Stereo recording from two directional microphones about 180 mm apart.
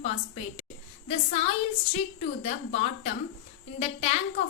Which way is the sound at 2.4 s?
35° left (ahead or behind).